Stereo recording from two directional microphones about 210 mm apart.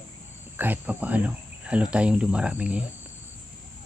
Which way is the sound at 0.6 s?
10° right (ahead or behind).